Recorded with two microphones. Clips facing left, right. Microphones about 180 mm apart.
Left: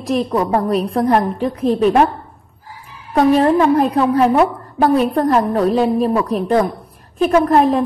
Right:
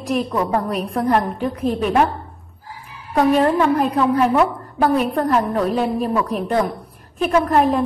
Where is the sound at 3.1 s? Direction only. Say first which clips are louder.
Left 3 dB; 35° left (ahead or behind).